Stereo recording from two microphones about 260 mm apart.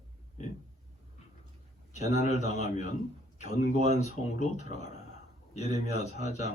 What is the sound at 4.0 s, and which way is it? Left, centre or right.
A man's voice, left.